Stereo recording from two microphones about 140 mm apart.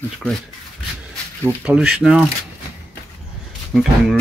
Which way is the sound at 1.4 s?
10° right (ahead or behind).